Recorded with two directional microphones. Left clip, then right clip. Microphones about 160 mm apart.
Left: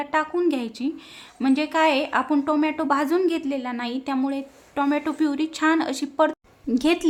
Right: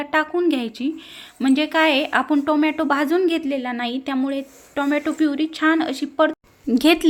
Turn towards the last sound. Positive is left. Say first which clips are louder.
# right 5 dB
turn(degrees=-25)  # may be behind; listen again after turning